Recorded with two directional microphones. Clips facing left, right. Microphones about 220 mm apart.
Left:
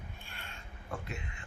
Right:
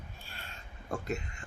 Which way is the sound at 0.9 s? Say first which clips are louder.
Right 7 dB; 40° right (ahead or behind).